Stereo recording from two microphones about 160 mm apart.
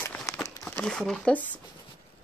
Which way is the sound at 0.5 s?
15° left (ahead or behind).